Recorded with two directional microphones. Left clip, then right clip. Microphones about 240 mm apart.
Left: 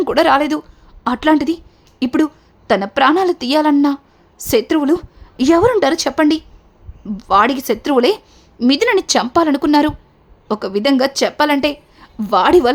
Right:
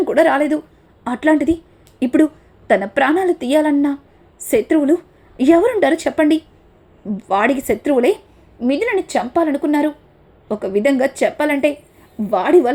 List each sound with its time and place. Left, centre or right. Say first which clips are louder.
0.1 s a woman's voice: left 2 dB; centre
2.6 s a woman's voice: left 2 dB; centre
8.5 s a woman's voice: left 4 dB; left